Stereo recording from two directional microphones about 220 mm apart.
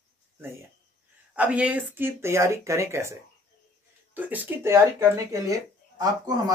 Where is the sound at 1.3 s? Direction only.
5° right (ahead or behind).